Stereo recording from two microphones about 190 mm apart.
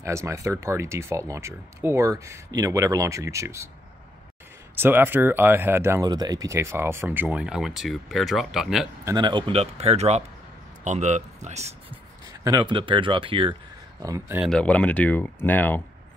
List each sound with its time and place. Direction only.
0.0 s speech: 15° right (ahead or behind)
4.7 s speech: 10° right (ahead or behind)
9.0 s speech: 25° right (ahead or behind)
12.4 s speech: 25° right (ahead or behind)
14.4 s speech: 5° left (ahead or behind)